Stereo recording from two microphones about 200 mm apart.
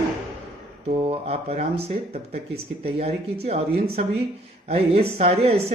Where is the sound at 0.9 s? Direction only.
30° right (ahead or behind).